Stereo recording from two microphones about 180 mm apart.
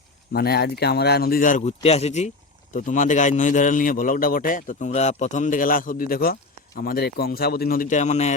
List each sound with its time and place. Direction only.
0.3 s a man's voice: 60° left (ahead or behind); by 8.3 s 40° left (ahead or behind)